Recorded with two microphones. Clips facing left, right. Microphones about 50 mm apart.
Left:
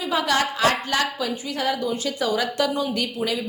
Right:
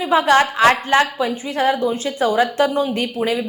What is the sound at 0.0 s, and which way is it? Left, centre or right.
A woman's voice, right.